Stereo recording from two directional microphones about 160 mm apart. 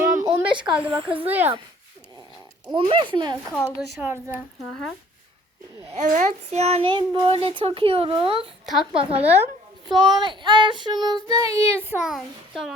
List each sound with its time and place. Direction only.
0.2 s a sound: 25° right (ahead or behind)
0.9 s a child's voice: 30° right (ahead or behind)
1.3 s a child's voice: 15° right (ahead or behind)
2.7 s a child's voice: 30° right (ahead or behind)
3.5 s a woman's voice: 15° left (ahead or behind)
4.0 s a child's voice: 15° right (ahead or behind)
5.8 s a child's voice: 40° right (ahead or behind)
8.6 s a woman's voice: centre (ahead or behind)
9.0 s a child's voice: 35° right (ahead or behind)
9.9 s child singing: 30° right (ahead or behind)
11.5 s a child's voice: 15° right (ahead or behind)
12.0 s a child's voice: centre (ahead or behind)